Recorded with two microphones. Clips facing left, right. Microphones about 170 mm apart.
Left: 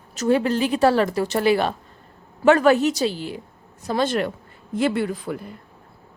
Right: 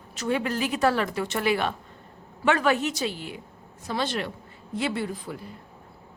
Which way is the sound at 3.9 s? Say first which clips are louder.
Left 7 dB; 50° left (ahead or behind).